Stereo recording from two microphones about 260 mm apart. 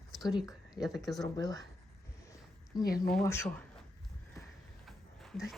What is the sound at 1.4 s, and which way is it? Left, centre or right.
Speech, centre.